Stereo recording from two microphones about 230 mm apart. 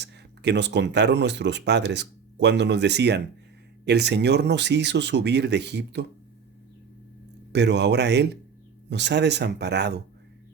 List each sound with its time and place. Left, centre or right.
0.0 s speech: right
7.5 s speech: right